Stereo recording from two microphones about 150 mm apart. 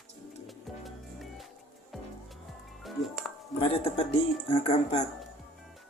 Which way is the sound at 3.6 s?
40° left (ahead or behind).